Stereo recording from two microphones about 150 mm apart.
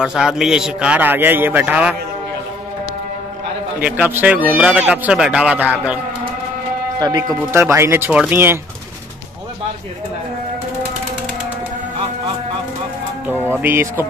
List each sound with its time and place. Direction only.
0.0 s speech: 5° right (ahead or behind)
3.8 s speech: 10° right (ahead or behind)
7.0 s speech: 25° right (ahead or behind)
13.6 s speech: 15° right (ahead or behind)